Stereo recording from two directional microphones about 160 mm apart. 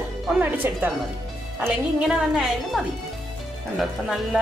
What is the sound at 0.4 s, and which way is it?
A woman's voice, 10° right (ahead or behind).